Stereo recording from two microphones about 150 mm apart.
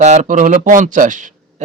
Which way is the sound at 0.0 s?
55° right (ahead or behind).